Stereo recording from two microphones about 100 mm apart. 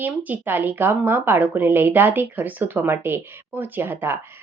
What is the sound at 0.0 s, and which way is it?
A woman's voice, 15° right (ahead or behind).